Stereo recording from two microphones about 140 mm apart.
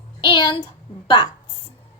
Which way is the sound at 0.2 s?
35° left (ahead or behind).